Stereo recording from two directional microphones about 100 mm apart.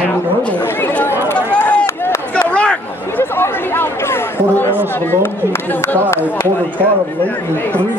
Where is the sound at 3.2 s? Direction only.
25° left (ahead or behind).